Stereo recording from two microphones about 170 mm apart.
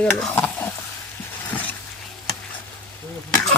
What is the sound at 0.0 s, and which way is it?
Stir, 5° left (ahead or behind).